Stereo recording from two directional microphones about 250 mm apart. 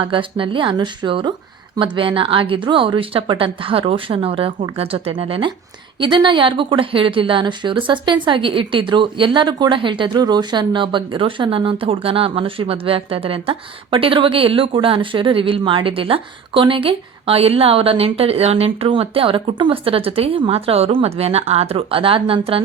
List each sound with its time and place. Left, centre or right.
0.0 s speech: centre